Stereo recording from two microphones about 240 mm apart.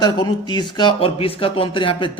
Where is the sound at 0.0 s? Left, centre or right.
Centre.